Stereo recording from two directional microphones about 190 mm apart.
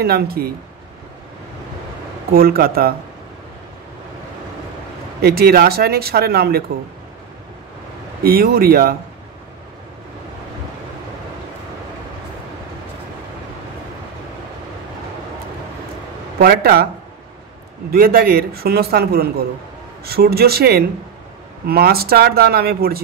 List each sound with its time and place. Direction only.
0.0 s a man's voice: 55° right (ahead or behind)
2.3 s speech: 50° right (ahead or behind)
5.2 s speech: 55° right (ahead or behind)
8.2 s speech: 50° right (ahead or behind)
16.3 s speech: 55° right (ahead or behind)
17.9 s a man's voice: 50° right (ahead or behind)